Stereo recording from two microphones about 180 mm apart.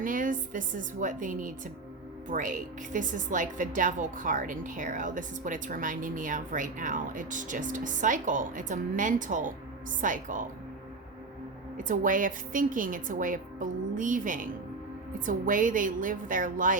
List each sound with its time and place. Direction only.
0.0 s a woman's voice: 50° right (ahead or behind)
11.8 s a woman's voice: 45° right (ahead or behind)